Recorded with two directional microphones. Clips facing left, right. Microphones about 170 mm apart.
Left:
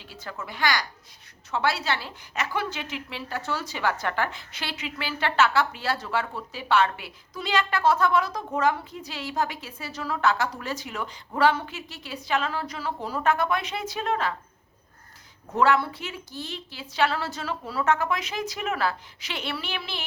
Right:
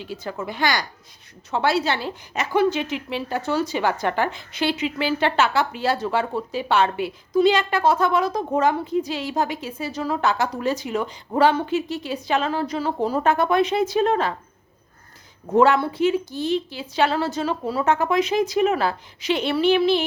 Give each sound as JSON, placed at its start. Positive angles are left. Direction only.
{"t": 0.0, "sound": "a woman's voice", "side_deg": -20}
{"t": 15.5, "sound": "a woman's voice", "side_deg": -20}